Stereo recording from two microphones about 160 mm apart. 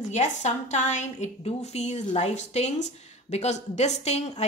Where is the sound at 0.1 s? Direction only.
45° left (ahead or behind).